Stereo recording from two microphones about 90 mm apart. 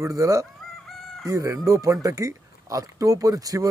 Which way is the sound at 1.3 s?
40° right (ahead or behind).